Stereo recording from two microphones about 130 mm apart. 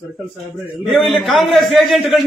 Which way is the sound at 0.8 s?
Centre (ahead or behind).